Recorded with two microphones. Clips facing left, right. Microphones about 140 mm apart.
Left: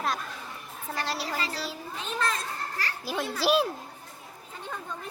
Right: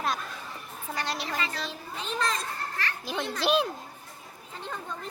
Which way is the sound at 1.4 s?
35° left (ahead or behind).